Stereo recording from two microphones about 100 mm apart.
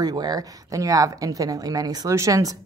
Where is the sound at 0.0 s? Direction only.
40° right (ahead or behind).